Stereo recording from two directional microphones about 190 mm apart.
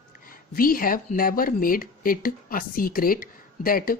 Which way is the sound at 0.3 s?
50° left (ahead or behind).